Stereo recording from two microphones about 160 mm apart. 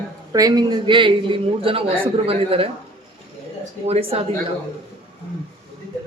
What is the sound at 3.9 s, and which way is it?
Speech, 40° right (ahead or behind).